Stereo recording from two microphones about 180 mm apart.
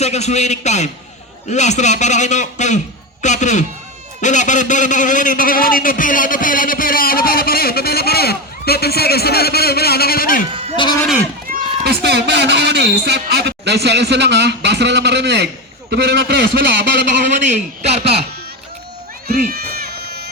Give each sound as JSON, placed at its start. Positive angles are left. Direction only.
{"t": 0.0, "sound": "a man's voice", "side_deg": 40}
{"t": 11.4, "sound": "speech", "side_deg": -55}
{"t": 17.3, "sound": "a man's voice", "side_deg": -40}
{"t": 19.3, "sound": "a sound", "side_deg": -55}